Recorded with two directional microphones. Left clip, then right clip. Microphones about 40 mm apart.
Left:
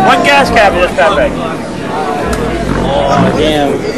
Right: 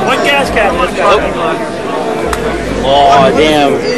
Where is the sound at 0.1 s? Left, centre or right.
Left.